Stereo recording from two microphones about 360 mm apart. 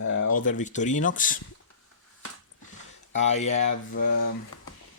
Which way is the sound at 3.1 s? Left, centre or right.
Centre.